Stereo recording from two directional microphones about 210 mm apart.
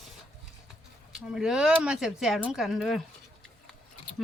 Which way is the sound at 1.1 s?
Centre (ahead or behind).